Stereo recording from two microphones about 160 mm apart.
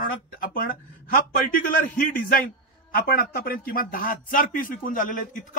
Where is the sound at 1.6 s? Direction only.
60° left (ahead or behind).